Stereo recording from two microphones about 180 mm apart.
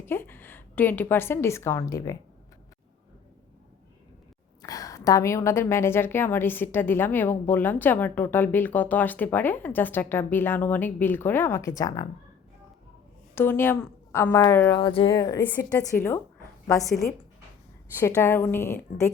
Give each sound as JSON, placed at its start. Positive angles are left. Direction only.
{"t": 0.0, "sound": "a woman's voice", "side_deg": 10}
{"t": 4.6, "sound": "a woman's voice", "side_deg": 20}
{"t": 13.3, "sound": "a woman's voice", "side_deg": 10}
{"t": 14.8, "sound": "speech", "side_deg": 30}
{"t": 15.1, "sound": "a woman's voice", "side_deg": 20}
{"t": 17.9, "sound": "a woman's voice", "side_deg": 15}